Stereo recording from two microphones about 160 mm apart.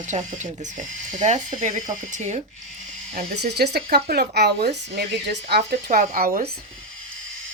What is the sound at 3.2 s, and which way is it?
Speech, 90° right.